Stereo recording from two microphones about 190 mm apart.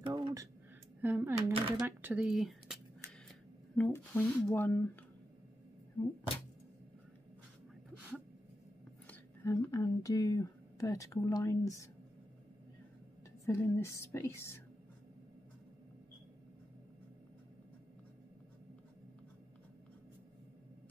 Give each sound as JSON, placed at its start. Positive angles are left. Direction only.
{"t": 0.0, "sound": "a sound", "side_deg": -25}
{"t": 1.0, "sound": "speech", "side_deg": -10}
{"t": 9.0, "sound": "speech", "side_deg": 10}
{"t": 13.5, "sound": "speech", "side_deg": 15}